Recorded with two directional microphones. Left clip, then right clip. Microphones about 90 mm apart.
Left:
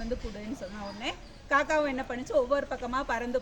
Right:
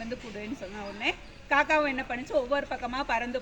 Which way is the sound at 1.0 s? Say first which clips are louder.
Right 6 dB; 30° left (ahead or behind).